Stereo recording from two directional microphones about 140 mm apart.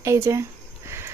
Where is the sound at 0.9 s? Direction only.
20° right (ahead or behind).